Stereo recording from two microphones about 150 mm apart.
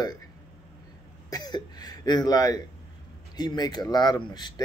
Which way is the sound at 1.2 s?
25° left (ahead or behind).